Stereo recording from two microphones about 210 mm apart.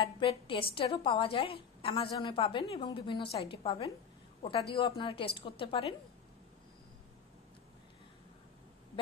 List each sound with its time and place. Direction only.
0.0 s a woman's voice: 25° left (ahead or behind)